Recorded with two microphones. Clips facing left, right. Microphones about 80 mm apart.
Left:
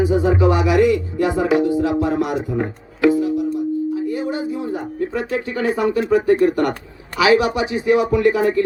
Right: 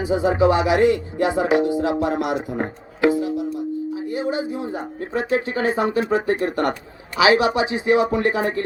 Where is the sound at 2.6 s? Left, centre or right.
Right.